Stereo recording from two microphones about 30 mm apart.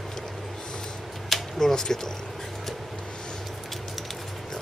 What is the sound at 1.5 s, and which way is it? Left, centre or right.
Speech, left.